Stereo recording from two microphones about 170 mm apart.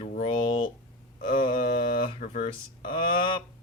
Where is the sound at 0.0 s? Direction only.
40° left (ahead or behind).